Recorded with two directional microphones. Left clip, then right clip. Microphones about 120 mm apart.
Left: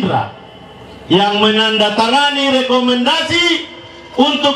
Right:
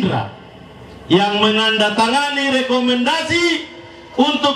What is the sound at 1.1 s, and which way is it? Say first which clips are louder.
A man's voice: left 3 dB; 20° right (ahead or behind).